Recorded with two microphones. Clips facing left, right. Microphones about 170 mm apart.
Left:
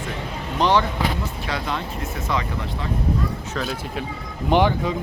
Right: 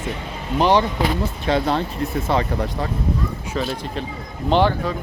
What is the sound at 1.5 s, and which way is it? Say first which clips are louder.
Speech: right 9 dB; 35° right (ahead or behind).